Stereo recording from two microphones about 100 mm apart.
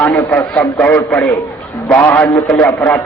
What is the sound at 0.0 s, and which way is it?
A man's voice, 15° left (ahead or behind).